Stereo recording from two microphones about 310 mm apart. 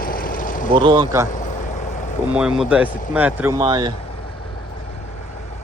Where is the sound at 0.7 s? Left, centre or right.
Centre.